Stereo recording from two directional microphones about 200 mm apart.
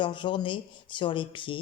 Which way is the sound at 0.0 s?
25° left (ahead or behind).